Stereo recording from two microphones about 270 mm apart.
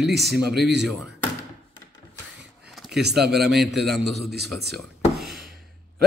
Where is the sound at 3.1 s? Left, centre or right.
Centre.